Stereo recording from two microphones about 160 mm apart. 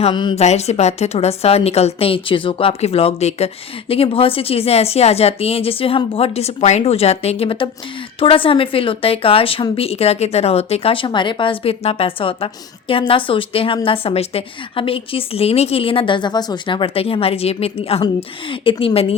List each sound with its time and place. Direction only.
0.0 s a woman's voice: 30° left (ahead or behind)
0.3 s a woman's voice: 45° left (ahead or behind)